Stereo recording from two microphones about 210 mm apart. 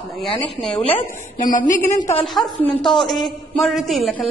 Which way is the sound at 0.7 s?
25° left (ahead or behind).